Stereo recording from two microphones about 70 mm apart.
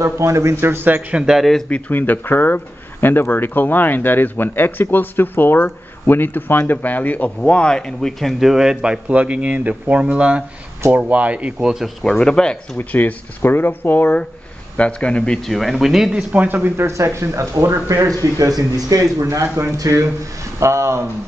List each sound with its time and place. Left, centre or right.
0.0 s speech: right
1.1 s speech: centre
1.7 s speech: left; by 11.7 s centre
12.0 s speech: centre
12.7 s speech: left
15.5 s speech: centre
16.3 s speech: right
17.8 s a man's voice: right